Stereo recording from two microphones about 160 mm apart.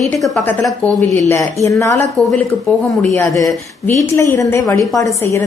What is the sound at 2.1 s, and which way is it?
Speech, centre (ahead or behind).